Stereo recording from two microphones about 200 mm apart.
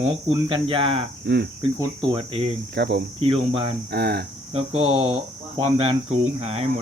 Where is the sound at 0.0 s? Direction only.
25° right (ahead or behind).